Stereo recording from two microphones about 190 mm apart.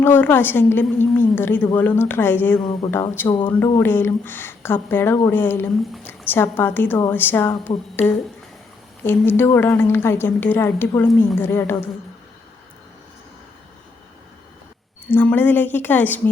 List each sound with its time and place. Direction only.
0.0 s speech: 10° left (ahead or behind)
3.2 s speech: 25° left (ahead or behind)
3.6 s speech: 10° left (ahead or behind)
15.1 s speech: 10° left (ahead or behind)